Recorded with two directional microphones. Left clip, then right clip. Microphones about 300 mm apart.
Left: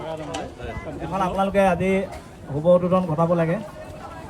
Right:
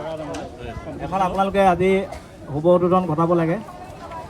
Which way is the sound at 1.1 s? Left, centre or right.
Right.